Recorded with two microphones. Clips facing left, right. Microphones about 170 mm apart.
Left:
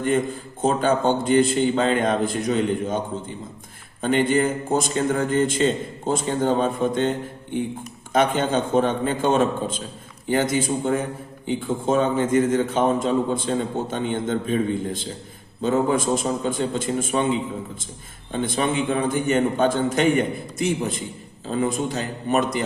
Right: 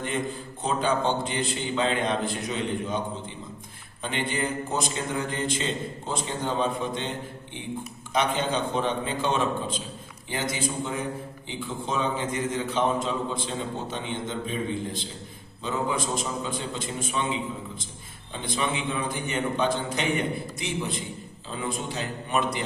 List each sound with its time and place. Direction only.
0.6 s a man's voice: 45° left (ahead or behind)
8.1 s a man's voice: 50° left (ahead or behind)
18.3 s a man's voice: 50° left (ahead or behind)